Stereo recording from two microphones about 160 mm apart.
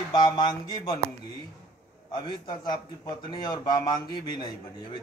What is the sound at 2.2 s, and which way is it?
A man's voice, 30° left (ahead or behind).